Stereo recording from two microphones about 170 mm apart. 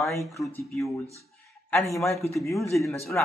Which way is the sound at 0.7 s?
20° left (ahead or behind).